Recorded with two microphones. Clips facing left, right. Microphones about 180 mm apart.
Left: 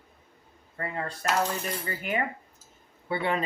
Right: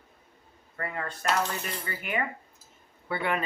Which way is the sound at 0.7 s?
30° left (ahead or behind).